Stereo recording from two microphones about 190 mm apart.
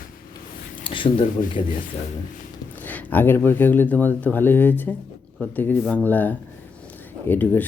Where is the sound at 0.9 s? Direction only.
25° left (ahead or behind).